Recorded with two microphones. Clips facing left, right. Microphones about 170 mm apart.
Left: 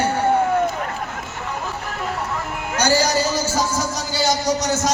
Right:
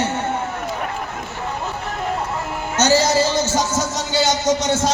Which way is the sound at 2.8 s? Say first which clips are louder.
Right 3 dB; 25° right (ahead or behind).